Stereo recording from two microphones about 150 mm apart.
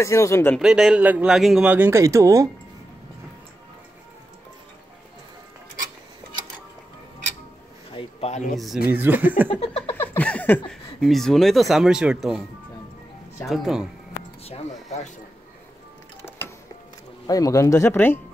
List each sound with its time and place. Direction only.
0.0 s speech: 20° left (ahead or behind)
0.6 s a man's voice: 5° right (ahead or behind); by 2.5 s 20° right (ahead or behind)
7.9 s a sound: 35° left (ahead or behind)
8.3 s speech: 55° left (ahead or behind)
8.5 s speech: centre (ahead or behind)
8.9 s a man's voice: 10° right (ahead or behind)
9.6 s a sound: 40° left (ahead or behind)
9.9 s speech: 10° left (ahead or behind)
13.5 s speech: 5° right (ahead or behind)
14.4 s a sound: 40° left (ahead or behind)
17.3 s speech: 25° left (ahead or behind)